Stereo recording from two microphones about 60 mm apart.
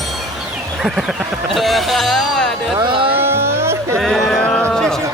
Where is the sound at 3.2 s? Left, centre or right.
Right.